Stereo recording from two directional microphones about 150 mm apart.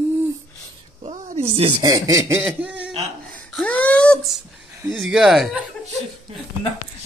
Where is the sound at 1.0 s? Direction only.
55° right (ahead or behind).